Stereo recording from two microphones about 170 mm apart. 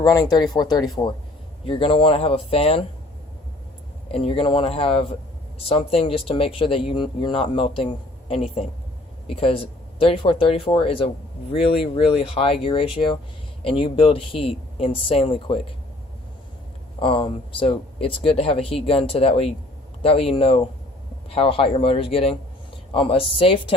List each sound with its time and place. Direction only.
0.0 s speech: 20° left (ahead or behind)
4.1 s speech: 35° left (ahead or behind)
17.0 s speech: 30° left (ahead or behind)